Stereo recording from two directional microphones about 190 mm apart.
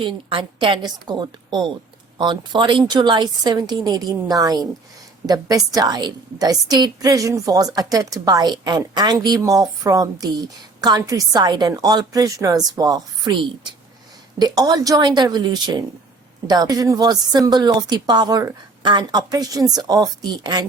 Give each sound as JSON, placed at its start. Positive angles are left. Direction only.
{"t": 0.0, "sound": "a woman's voice", "side_deg": -30}